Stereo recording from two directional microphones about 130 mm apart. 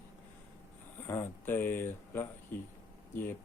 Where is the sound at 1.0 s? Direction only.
15° left (ahead or behind).